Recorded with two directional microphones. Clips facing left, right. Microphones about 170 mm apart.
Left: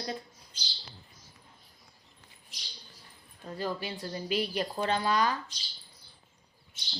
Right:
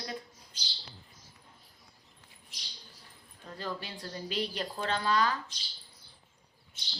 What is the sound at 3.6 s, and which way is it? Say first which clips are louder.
A woman's voice: left 4 dB; 10° left (ahead or behind).